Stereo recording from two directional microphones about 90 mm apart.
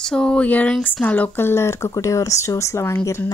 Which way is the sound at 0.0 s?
10° left (ahead or behind).